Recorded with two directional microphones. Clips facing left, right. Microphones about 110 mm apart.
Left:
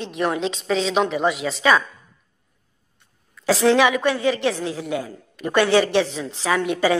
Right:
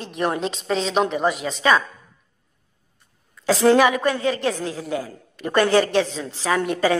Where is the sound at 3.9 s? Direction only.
5° left (ahead or behind).